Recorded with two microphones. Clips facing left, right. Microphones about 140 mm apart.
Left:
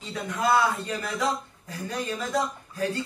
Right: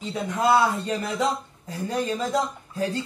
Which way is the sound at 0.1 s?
25° right (ahead or behind).